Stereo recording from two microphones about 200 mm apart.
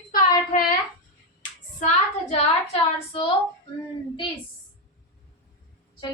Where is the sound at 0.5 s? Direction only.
35° left (ahead or behind).